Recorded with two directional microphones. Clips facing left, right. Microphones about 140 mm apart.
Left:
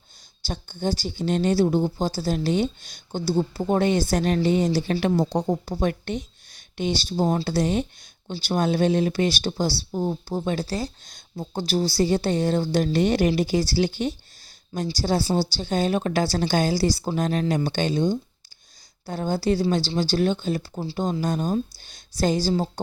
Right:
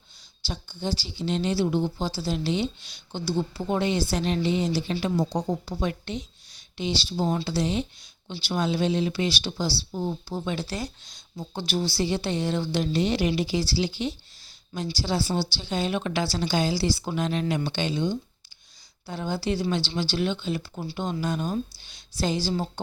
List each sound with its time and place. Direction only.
0.4 s speech: 50° left (ahead or behind)
4.9 s speech: 65° left (ahead or behind); by 10.9 s 35° left (ahead or behind)
11.0 s speech: 50° left (ahead or behind)